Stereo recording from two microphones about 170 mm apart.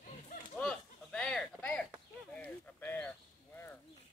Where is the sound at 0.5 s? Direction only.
5° left (ahead or behind).